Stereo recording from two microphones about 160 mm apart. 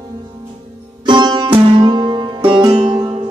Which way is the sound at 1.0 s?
25° right (ahead or behind).